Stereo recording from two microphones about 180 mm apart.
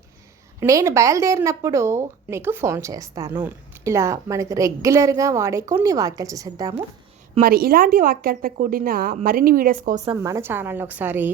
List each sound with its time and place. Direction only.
0.6 s a woman's voice: 20° right (ahead or behind)
7.4 s speech: 55° right (ahead or behind)
10.2 s a woman's voice: 15° right (ahead or behind)